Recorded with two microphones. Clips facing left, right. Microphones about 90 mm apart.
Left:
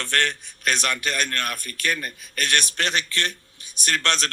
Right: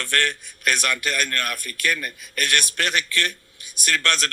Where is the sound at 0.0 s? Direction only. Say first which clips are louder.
Even; 25° left (ahead or behind).